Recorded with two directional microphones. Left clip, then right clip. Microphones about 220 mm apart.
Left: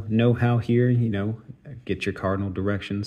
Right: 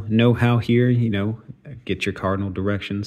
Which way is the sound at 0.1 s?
20° right (ahead or behind).